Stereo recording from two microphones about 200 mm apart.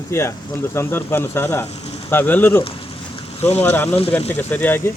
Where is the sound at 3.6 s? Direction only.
10° left (ahead or behind).